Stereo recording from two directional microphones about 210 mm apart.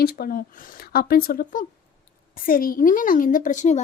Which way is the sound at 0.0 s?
45° left (ahead or behind).